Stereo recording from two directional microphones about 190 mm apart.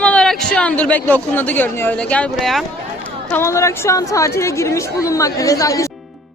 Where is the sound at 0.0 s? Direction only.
5° left (ahead or behind).